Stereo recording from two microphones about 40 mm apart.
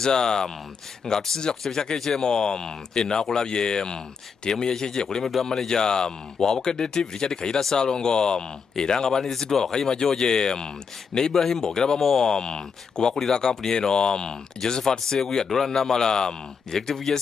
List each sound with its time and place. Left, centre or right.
0.0 s speech: centre